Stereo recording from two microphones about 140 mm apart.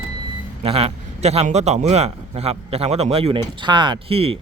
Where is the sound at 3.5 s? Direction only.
35° right (ahead or behind).